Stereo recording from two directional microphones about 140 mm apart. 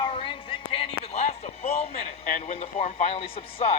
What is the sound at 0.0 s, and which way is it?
Music, 40° left (ahead or behind).